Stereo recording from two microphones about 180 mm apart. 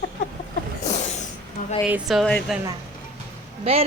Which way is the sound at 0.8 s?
40° left (ahead or behind).